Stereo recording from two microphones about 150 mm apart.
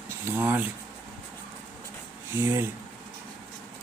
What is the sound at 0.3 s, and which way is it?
Speech, 15° right (ahead or behind).